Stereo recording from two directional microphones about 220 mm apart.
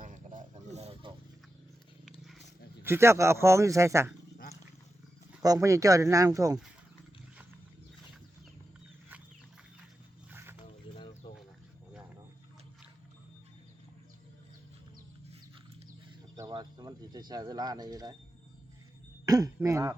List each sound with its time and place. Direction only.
0.0 s a sound: 35° right (ahead or behind)
2.8 s speech: 10° right (ahead or behind)
5.4 s speech: 15° right (ahead or behind)
16.3 s bird: 20° right (ahead or behind)
19.2 s throat clearing: 15° right (ahead or behind)